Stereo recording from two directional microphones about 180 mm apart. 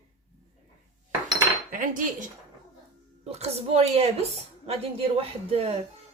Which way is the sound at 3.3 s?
35° right (ahead or behind).